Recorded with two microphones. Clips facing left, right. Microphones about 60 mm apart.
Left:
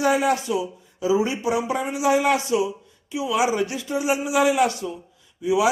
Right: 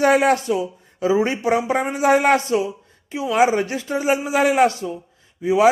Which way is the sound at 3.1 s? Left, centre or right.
Right.